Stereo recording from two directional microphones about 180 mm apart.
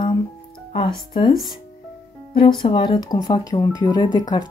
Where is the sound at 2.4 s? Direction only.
30° left (ahead or behind).